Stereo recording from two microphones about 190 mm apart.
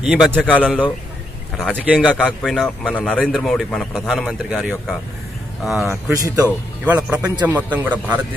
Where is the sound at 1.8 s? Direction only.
5° right (ahead or behind).